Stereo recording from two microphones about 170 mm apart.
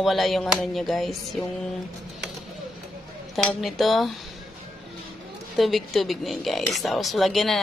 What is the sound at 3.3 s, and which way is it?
Speech, centre (ahead or behind).